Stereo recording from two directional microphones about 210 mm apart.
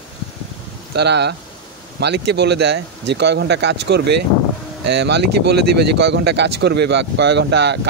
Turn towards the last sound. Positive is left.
turn(degrees=-55)  # may be behind; listen again after turning